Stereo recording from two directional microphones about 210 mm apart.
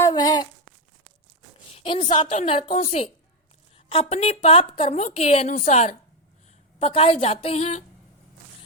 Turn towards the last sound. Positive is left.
turn(degrees=30)  # may be behind; listen again after turning